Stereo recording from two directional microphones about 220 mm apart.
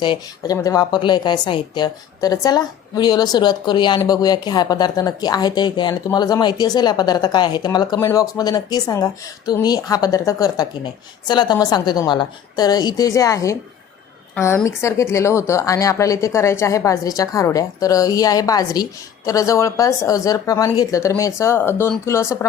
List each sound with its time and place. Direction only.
0.0 s a woman's voice: 20° left (ahead or behind)